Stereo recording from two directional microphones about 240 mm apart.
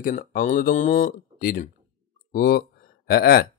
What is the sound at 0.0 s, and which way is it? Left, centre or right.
Speech, left.